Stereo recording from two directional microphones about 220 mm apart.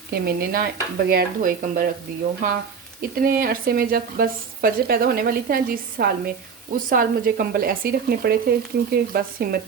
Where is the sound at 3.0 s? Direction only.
40° right (ahead or behind).